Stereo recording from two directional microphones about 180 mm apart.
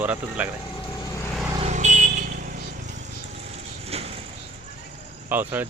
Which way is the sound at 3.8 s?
35° right (ahead or behind).